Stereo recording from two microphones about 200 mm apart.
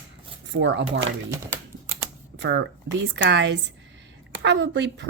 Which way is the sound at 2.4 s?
65° right (ahead or behind).